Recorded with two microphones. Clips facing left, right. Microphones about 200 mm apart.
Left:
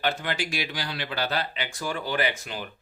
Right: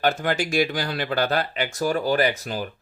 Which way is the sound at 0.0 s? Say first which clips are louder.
Right 6 dB; 45° right (ahead or behind).